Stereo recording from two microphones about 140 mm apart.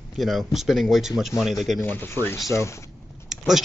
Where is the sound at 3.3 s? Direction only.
Centre (ahead or behind).